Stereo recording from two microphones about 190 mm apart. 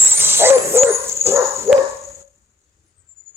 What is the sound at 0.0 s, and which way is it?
Dog, 10° right (ahead or behind).